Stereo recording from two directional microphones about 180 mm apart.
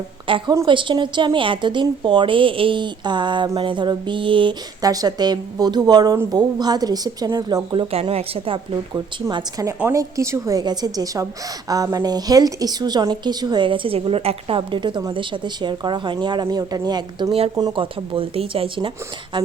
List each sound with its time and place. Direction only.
0.3 s speech: 30° right (ahead or behind)